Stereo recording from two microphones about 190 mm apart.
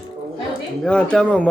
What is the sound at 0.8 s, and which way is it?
Speech, 5° left (ahead or behind).